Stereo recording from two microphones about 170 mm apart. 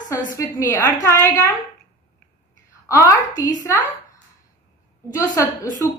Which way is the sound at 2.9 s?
20° left (ahead or behind).